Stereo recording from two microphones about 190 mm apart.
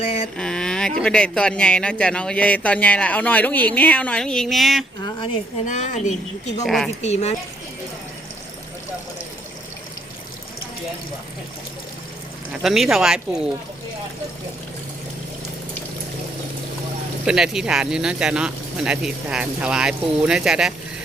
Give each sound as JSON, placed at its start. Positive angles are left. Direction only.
{"t": 0.0, "sound": "a sound", "side_deg": 30}
{"t": 0.3, "sound": "speech", "side_deg": 5}
{"t": 5.6, "sound": "a woman's voice", "side_deg": 40}
{"t": 6.7, "sound": "speech", "side_deg": 0}
{"t": 7.0, "sound": "a woman's voice", "side_deg": 35}
{"t": 12.6, "sound": "speech", "side_deg": 0}
{"t": 17.2, "sound": "speech", "side_deg": -5}